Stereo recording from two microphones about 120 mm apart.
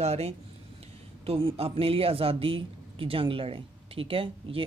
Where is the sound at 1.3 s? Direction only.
50° right (ahead or behind).